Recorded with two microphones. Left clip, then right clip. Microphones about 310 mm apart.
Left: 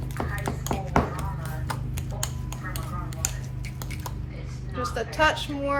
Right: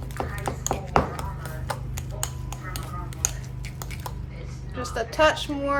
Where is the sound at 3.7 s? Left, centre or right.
Centre.